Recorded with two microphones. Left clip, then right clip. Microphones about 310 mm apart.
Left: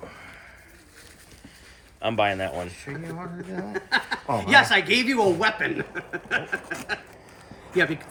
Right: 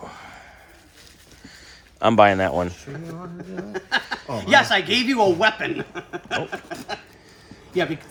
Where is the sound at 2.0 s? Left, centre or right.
Right.